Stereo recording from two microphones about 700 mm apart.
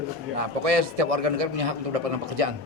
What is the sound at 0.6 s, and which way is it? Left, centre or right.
A man's voice, right.